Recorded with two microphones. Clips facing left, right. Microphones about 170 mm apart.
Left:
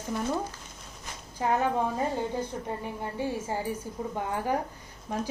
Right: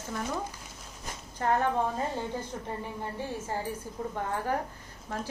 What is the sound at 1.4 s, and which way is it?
Speech, 10° left (ahead or behind).